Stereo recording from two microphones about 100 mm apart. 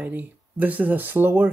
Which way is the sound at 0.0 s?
15° right (ahead or behind).